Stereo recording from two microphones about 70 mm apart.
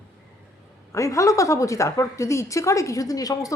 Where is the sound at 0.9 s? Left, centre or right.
Left.